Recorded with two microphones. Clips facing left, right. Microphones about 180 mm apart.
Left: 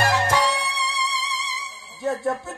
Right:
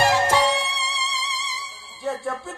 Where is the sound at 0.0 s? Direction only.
20° right (ahead or behind).